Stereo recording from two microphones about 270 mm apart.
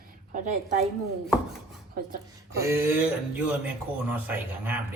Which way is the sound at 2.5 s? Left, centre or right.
Centre.